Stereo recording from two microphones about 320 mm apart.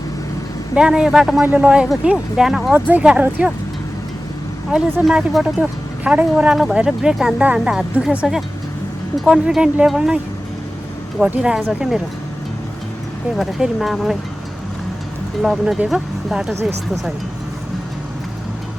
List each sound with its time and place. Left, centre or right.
0.8 s speech: centre
4.7 s speech: centre
11.2 s speech: centre
13.3 s speech: centre
15.4 s speech: centre